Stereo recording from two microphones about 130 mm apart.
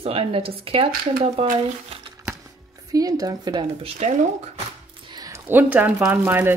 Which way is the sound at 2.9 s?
30° right (ahead or behind).